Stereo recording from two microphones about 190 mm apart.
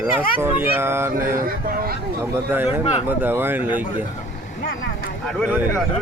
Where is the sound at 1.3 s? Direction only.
50° right (ahead or behind).